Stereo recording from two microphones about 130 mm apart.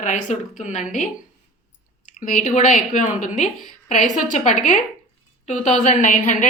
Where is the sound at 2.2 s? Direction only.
80° left.